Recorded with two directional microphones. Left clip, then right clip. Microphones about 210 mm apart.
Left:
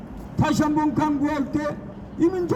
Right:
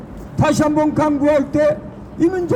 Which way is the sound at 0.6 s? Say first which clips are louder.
Right 5 dB; 35° right (ahead or behind).